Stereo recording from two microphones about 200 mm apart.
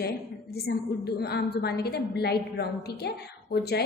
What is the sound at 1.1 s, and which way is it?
A woman's voice, 55° left (ahead or behind).